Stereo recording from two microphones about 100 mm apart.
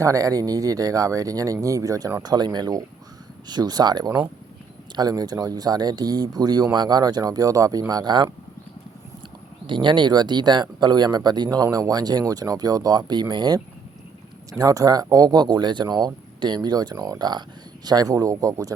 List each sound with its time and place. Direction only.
0.0 s speech: 35° right (ahead or behind)
9.6 s speech: 50° right (ahead or behind)
14.6 s speech: 35° right (ahead or behind)